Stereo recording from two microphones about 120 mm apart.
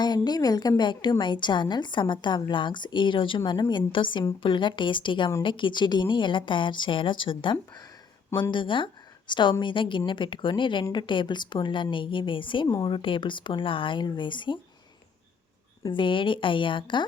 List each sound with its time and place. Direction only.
0.0 s a woman's voice: 35° left (ahead or behind)
12.6 s a woman's voice: 35° left (ahead or behind)
15.8 s speech: 40° left (ahead or behind)